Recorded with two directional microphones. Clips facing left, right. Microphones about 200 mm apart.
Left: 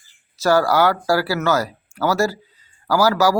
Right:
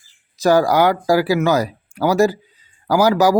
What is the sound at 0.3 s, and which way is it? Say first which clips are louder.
Speech: right 2 dB; 15° right (ahead or behind).